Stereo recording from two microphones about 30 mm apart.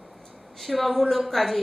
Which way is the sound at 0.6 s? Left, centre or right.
Centre.